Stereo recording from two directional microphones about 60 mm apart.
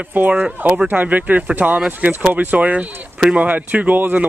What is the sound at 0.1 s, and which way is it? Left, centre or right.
Speech, right.